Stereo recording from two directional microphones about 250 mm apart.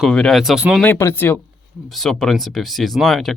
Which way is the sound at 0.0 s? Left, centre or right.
Centre.